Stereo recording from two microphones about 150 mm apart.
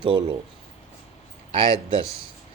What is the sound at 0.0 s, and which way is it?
Speech, 35° right (ahead or behind).